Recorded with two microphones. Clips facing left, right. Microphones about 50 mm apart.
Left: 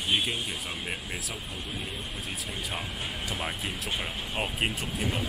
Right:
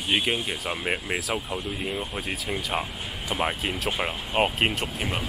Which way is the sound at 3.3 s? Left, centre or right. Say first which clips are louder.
Right 10 dB; right.